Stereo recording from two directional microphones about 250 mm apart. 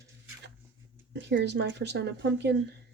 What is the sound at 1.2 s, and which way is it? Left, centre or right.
Speech, right.